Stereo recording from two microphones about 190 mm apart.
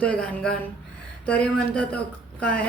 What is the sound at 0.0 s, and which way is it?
Speech, 5° left (ahead or behind).